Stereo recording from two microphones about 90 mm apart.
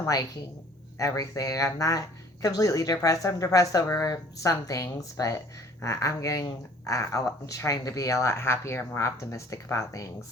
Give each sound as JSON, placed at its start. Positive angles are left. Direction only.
{"t": 0.9, "sound": "speech", "side_deg": 40}